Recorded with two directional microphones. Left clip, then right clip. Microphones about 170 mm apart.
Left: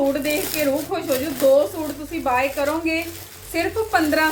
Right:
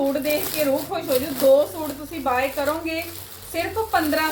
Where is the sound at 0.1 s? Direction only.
15° left (ahead or behind).